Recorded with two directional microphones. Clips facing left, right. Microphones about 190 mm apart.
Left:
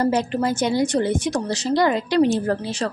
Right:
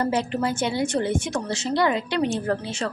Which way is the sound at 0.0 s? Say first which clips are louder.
Left 3 dB; 40° left (ahead or behind).